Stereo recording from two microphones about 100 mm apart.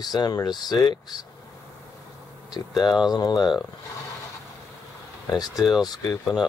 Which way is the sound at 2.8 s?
40° left (ahead or behind).